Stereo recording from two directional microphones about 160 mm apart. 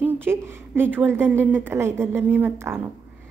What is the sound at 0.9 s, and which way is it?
A woman's voice, 10° right (ahead or behind).